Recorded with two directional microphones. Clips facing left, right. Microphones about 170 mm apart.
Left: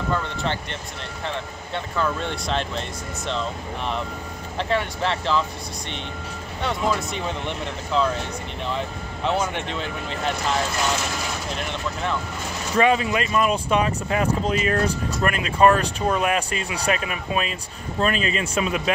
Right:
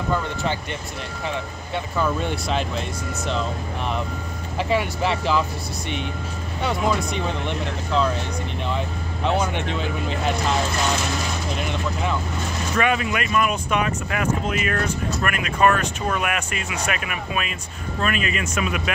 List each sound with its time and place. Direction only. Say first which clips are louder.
0.1 s speech: right 2 dB; 5° right (ahead or behind)
2.0 s speech: right 2 dB; 10° right (ahead or behind)
4.6 s speech: right 2 dB; 10° right (ahead or behind)
6.6 s speech: right 1 dB; centre (ahead or behind)
11.5 s speech: right 3 dB; 5° right (ahead or behind)
12.7 s speech: left 3 dB; 30° left (ahead or behind)